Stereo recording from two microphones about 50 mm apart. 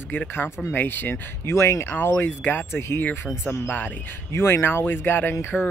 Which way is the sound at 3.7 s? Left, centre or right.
Left.